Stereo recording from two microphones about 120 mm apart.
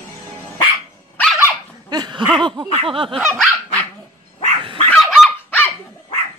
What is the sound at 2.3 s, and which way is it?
Speech, 40° right (ahead or behind).